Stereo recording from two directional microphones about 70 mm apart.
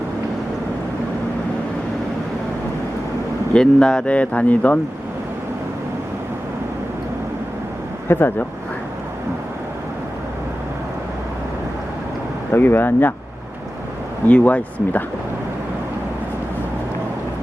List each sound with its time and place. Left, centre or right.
3.5 s speech: centre
8.0 s speech: left
12.5 s speech: left
14.3 s speech: centre